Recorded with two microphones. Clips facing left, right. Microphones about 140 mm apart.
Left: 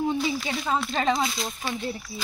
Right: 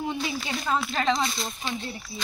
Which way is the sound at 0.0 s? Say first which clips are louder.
Left 4 dB; 5° right (ahead or behind).